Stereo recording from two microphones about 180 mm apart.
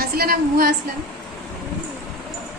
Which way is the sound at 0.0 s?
55° right (ahead or behind).